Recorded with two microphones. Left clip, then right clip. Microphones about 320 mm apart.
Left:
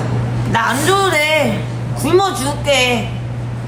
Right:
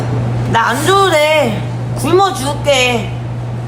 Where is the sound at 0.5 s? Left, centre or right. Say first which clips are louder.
Right 3 dB; centre.